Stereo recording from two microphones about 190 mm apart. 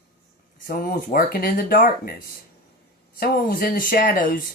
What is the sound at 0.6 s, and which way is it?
Speech, 50° left (ahead or behind).